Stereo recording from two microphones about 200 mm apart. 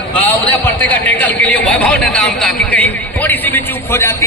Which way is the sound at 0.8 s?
10° left (ahead or behind).